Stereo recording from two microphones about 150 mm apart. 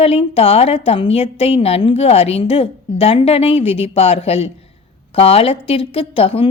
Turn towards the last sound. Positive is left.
turn(degrees=40)  # may be behind; listen again after turning